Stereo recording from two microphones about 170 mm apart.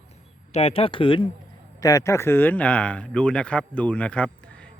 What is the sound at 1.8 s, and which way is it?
Speech, 20° left (ahead or behind).